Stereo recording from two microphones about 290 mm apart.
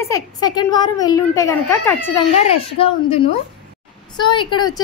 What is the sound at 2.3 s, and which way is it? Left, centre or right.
A woman's voice, centre.